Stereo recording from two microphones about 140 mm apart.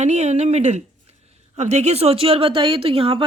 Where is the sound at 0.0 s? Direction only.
55° right (ahead or behind).